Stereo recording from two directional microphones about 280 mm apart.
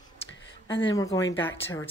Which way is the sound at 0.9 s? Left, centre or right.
Centre.